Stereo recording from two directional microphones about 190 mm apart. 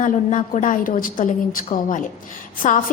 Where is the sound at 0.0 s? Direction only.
40° left (ahead or behind).